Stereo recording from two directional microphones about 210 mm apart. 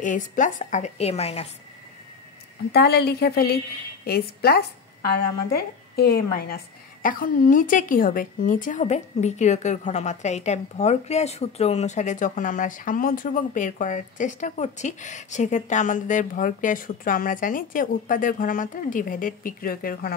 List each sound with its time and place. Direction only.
0.0 s a woman's voice: 35° left (ahead or behind)
2.7 s a woman's voice: 50° left (ahead or behind)